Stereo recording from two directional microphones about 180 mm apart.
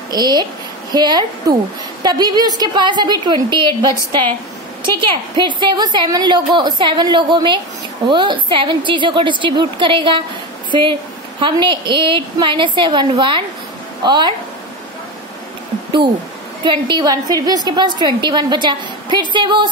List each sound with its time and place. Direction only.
0.1 s a woman's voice: 25° right (ahead or behind)
16.6 s a woman's voice: 25° right (ahead or behind)